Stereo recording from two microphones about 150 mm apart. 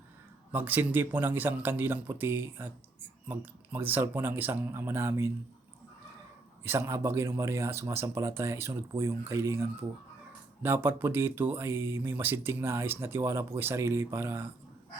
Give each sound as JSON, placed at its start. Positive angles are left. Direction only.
{"t": 0.5, "sound": "speech", "side_deg": -15}
{"t": 6.7, "sound": "speech", "side_deg": -20}